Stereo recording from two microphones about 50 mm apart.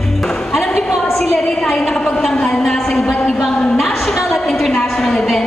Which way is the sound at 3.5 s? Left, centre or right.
Centre.